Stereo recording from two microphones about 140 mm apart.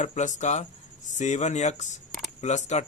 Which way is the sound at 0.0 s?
55° left (ahead or behind).